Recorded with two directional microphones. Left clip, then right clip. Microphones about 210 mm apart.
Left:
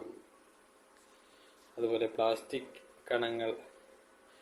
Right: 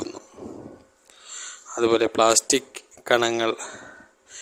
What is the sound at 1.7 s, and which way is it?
Speech, 45° right (ahead or behind).